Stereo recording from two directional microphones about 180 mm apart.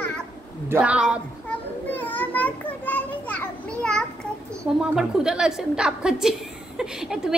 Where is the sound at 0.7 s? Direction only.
10° right (ahead or behind).